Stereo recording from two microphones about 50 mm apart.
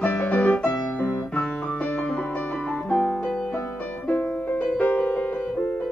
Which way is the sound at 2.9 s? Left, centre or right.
Left.